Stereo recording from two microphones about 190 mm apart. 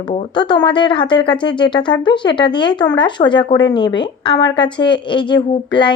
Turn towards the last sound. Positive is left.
turn(degrees=25)  # may be behind; listen again after turning